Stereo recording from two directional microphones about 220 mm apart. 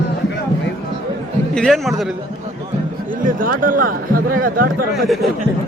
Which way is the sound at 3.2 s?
40° right (ahead or behind).